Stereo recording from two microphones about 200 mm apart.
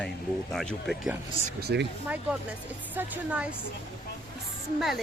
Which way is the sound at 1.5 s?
50° right (ahead or behind).